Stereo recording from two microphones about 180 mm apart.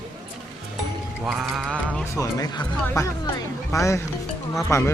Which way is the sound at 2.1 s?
20° left (ahead or behind).